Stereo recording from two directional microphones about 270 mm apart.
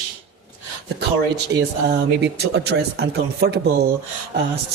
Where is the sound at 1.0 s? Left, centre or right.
Right.